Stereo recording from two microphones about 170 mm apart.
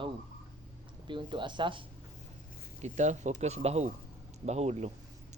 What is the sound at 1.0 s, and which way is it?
Speech, 30° right (ahead or behind).